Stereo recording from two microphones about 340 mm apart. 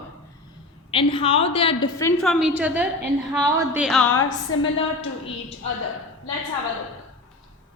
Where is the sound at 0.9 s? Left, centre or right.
Centre.